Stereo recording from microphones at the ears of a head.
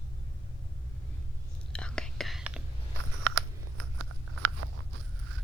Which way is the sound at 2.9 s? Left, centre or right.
Right.